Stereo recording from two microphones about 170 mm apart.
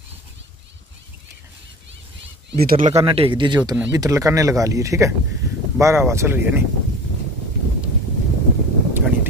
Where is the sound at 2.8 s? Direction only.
30° right (ahead or behind); by 6.6 s 10° right (ahead or behind).